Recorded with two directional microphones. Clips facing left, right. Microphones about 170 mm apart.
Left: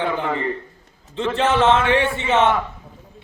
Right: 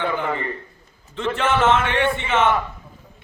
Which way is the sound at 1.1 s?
30° left (ahead or behind).